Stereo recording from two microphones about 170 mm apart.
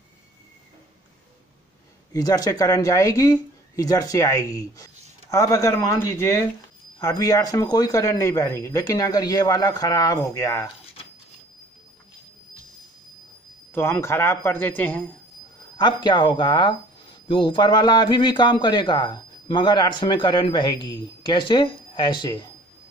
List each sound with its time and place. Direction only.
2.1 s a man's voice: 20° left (ahead or behind)
13.7 s a man's voice: 15° left (ahead or behind)
15.8 s a man's voice: 25° left (ahead or behind)